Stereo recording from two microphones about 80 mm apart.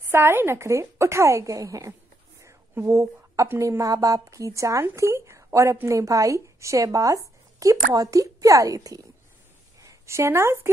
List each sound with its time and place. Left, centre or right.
0.1 s a woman's voice: right
2.4 s a sound: right
3.5 s a woman's voice: right
9.8 s a woman's voice: right